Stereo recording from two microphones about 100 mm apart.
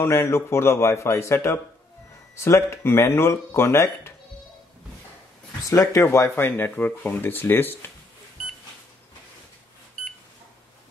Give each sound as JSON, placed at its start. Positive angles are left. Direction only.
{"t": 0.0, "sound": "speech", "side_deg": 25}
{"t": 5.7, "sound": "speech", "side_deg": 35}